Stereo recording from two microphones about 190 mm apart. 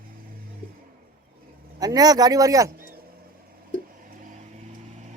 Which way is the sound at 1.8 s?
20° right (ahead or behind).